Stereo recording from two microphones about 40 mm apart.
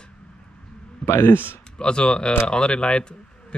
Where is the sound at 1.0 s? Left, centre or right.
Left.